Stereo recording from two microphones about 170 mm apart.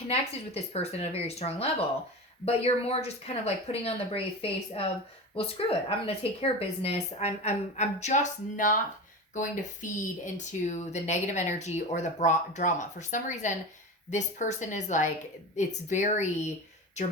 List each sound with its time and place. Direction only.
0.1 s speech: 40° left (ahead or behind)